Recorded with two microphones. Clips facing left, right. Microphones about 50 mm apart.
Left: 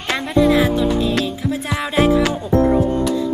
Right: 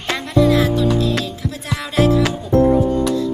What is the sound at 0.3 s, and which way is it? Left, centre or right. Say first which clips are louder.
Music: even; centre.